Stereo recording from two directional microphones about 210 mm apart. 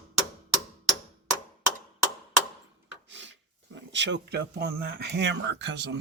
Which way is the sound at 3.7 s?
60° right (ahead or behind).